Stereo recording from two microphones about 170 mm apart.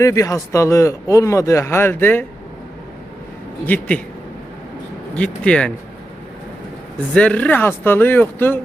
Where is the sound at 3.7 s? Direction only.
10° left (ahead or behind).